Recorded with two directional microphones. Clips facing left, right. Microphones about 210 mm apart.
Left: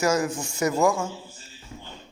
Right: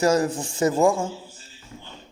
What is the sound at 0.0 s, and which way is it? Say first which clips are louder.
Speech: right 3 dB; 35° right (ahead or behind).